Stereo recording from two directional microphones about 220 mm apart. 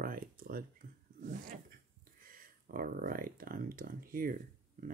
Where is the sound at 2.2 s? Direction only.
40° right (ahead or behind).